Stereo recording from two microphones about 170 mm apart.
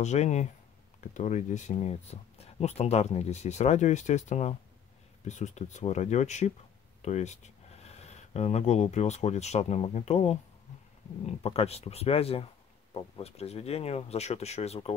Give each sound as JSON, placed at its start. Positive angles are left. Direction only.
{"t": 0.0, "sound": "speech", "side_deg": 40}